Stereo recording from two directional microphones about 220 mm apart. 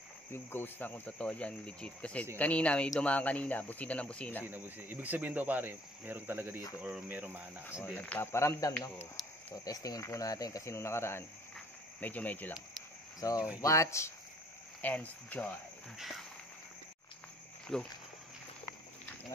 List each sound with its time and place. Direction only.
0.3 s speech: 10° left (ahead or behind)
4.5 s speech: 10° right (ahead or behind)
7.8 s speech: 5° left (ahead or behind)
9.2 s cricket: centre (ahead or behind)
9.7 s speech: 15° left (ahead or behind)
17.7 s speech: centre (ahead or behind)